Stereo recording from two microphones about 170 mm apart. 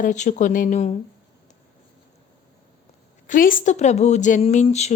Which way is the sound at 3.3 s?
55° left (ahead or behind).